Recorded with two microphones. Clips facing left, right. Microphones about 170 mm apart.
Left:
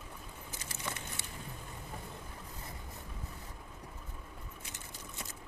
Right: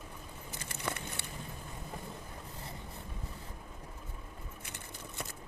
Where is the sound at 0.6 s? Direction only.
60° right (ahead or behind).